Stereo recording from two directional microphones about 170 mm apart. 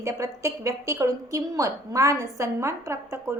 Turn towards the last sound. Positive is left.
turn(degrees=-15)  # may be behind; listen again after turning